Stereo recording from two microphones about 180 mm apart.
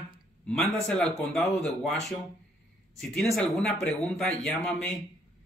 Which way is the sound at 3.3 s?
5° left (ahead or behind).